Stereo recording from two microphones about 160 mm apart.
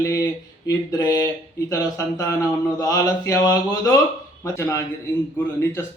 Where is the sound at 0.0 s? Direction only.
20° left (ahead or behind).